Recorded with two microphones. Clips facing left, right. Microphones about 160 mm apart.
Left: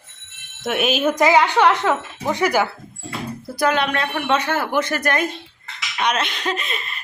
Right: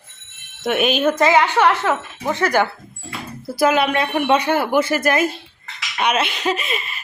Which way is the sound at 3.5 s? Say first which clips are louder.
Right 3 dB; 5° right (ahead or behind).